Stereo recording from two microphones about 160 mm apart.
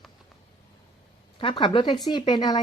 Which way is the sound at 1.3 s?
30° left (ahead or behind).